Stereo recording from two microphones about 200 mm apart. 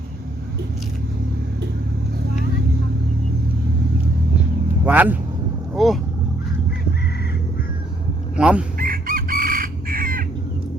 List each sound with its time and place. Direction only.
4.9 s speech: 10° right (ahead or behind)
8.4 s speech: 5° right (ahead or behind)
8.8 s chicken: 45° right (ahead or behind)